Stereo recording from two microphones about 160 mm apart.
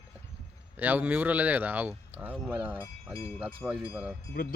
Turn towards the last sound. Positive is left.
turn(degrees=70)  # may be behind; listen again after turning